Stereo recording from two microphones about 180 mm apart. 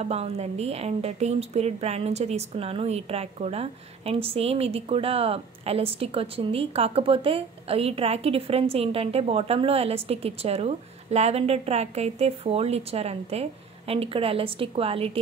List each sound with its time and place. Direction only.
0.0 s a woman's voice: 35° right (ahead or behind)